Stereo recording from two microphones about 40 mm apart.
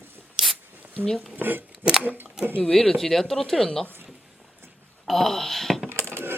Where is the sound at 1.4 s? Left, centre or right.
Right.